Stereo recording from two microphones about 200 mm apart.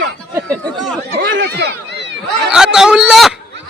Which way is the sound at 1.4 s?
60° right (ahead or behind).